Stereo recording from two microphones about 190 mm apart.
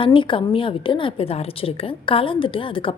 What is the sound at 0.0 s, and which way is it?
A woman's voice, 25° left (ahead or behind).